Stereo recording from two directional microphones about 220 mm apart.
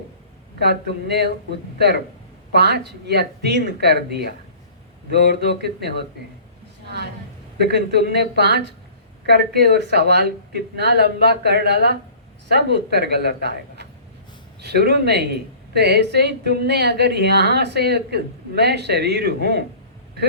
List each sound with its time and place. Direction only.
0.6 s speech: 50° right (ahead or behind)
2.5 s speech: 50° right (ahead or behind)
6.8 s a sound: 50° right (ahead or behind)
7.6 s speech: 50° right (ahead or behind)